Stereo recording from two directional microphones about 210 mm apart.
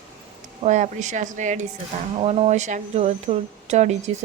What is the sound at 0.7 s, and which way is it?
A woman's voice, 35° right (ahead or behind).